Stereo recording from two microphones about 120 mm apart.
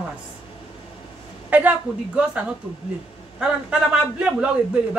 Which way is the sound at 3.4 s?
10° right (ahead or behind).